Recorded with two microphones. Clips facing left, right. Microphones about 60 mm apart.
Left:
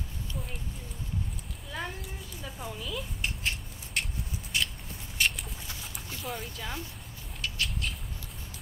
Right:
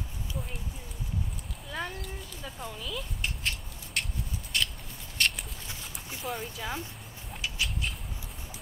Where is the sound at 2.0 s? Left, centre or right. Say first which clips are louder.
Right 1 dB; centre.